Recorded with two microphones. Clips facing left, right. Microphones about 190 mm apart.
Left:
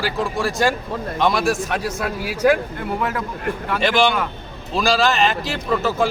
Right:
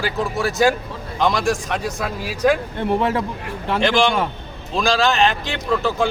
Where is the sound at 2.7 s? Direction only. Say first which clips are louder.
Right 4 dB; 25° right (ahead or behind).